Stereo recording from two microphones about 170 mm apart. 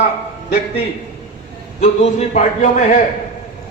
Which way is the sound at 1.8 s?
40° left (ahead or behind).